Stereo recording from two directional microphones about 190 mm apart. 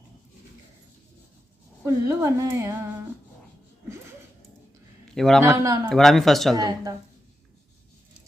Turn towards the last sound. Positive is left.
turn(degrees=-20)  # may be behind; listen again after turning